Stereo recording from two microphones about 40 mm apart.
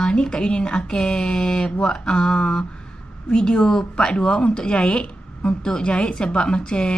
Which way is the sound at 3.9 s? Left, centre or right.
Left.